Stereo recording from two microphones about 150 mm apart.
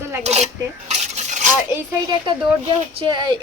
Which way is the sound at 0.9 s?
50° right (ahead or behind).